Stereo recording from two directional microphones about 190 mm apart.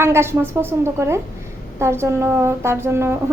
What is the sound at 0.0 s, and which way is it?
A woman's voice, 15° right (ahead or behind).